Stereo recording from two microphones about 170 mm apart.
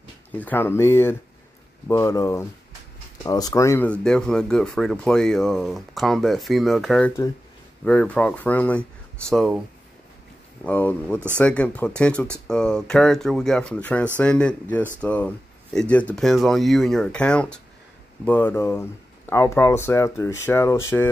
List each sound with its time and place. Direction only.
0.3 s speech: 10° left (ahead or behind)
10.6 s speech: 10° left (ahead or behind)